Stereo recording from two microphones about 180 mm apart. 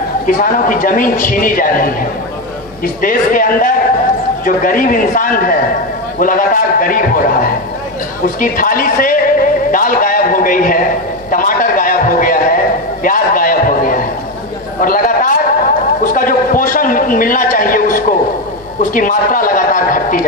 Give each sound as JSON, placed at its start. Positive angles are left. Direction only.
{"t": 0.3, "sound": "a woman's voice", "side_deg": 50}